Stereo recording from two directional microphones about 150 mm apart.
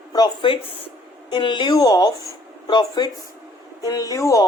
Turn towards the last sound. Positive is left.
turn(degrees=20)  # may be behind; listen again after turning